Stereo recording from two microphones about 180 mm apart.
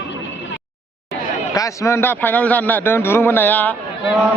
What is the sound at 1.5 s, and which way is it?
A man's voice, 15° left (ahead or behind).